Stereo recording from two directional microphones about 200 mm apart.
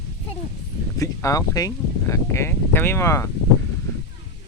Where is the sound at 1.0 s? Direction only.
15° left (ahead or behind).